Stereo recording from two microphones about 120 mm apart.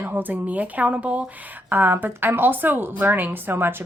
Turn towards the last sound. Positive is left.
turn(degrees=-20)  # may be behind; listen again after turning